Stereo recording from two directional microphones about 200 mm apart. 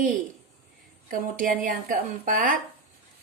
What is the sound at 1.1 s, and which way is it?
A woman's voice, 40° right (ahead or behind).